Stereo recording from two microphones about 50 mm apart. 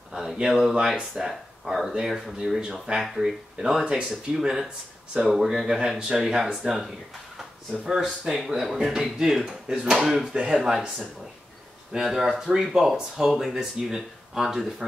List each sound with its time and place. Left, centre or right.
0.1 s a sound: centre
1.1 s speech: centre
3.0 s speech: centre
3.5 s speech: centre
7.9 s speech: centre
10.2 s speech: centre
11.9 s speech: centre